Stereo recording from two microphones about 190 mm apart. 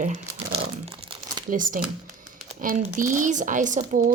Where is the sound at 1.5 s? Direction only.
45° right (ahead or behind).